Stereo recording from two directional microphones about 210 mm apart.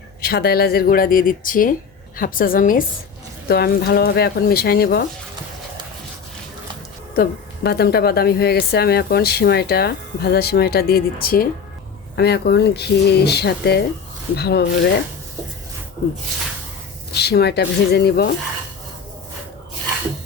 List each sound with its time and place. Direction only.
0.2 s a woman's voice: 45° left (ahead or behind)
7.2 s a woman's voice: 50° left (ahead or behind)
17.2 s a woman's voice: 50° left (ahead or behind)